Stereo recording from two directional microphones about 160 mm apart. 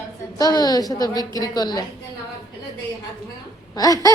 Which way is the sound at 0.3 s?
25° left (ahead or behind).